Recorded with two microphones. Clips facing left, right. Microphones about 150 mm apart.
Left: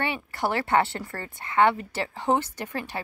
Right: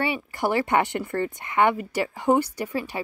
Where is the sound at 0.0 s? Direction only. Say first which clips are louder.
Right 2 dB; 10° right (ahead or behind).